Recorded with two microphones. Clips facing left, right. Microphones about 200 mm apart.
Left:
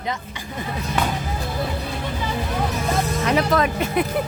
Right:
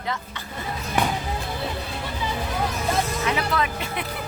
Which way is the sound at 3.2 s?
40° left (ahead or behind).